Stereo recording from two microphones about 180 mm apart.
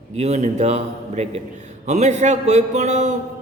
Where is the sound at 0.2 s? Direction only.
40° right (ahead or behind).